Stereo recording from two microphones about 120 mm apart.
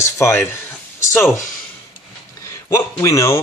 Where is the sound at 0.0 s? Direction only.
20° left (ahead or behind).